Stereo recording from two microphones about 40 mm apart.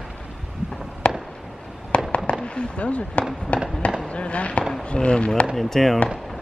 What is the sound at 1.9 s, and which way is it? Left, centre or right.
Fireworks, left.